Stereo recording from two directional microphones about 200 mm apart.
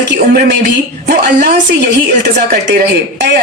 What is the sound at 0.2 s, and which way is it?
Speech, 45° right (ahead or behind).